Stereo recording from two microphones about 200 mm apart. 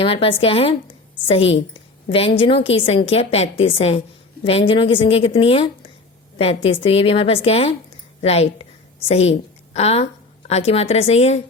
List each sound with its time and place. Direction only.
0.0 s a woman's voice: 30° left (ahead or behind)
2.0 s a woman's voice: 30° left (ahead or behind)